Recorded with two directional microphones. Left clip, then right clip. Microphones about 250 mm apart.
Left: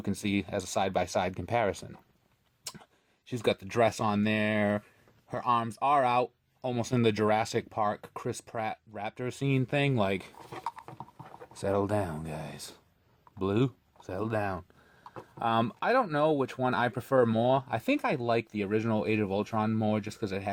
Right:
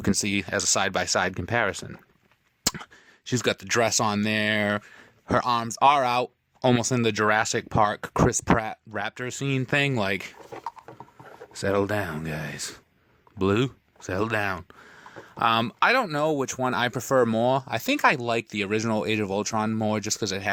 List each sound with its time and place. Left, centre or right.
0.0 s speech: right
3.2 s speech: right
10.6 s a sound: centre
11.5 s speech: right